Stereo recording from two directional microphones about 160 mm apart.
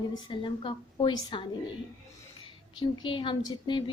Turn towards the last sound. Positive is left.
turn(degrees=30)  # may be behind; listen again after turning